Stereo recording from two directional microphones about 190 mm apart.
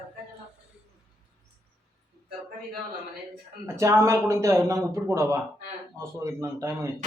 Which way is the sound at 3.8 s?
15° right (ahead or behind).